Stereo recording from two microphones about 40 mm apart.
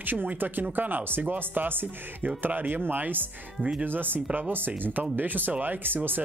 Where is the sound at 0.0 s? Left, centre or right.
Right.